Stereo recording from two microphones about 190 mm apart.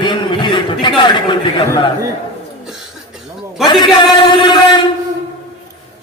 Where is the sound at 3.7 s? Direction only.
25° left (ahead or behind).